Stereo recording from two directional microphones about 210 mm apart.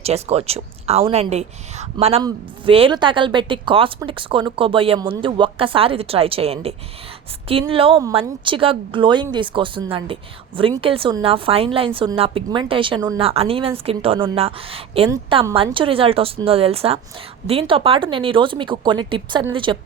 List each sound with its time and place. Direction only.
0.0 s a woman's voice: 30° right (ahead or behind)